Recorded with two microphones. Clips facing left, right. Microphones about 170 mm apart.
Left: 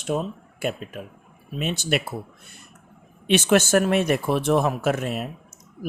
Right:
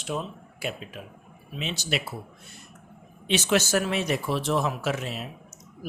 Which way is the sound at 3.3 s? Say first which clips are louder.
Left 5 dB; 55° left (ahead or behind).